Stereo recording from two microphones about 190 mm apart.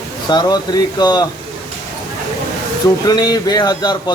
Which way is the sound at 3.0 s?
20° left (ahead or behind).